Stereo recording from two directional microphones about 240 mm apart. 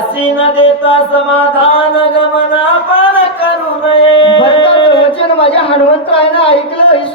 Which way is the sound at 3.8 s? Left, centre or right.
Left.